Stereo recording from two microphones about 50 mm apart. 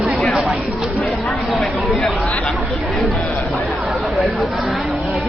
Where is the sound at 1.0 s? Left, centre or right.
Centre.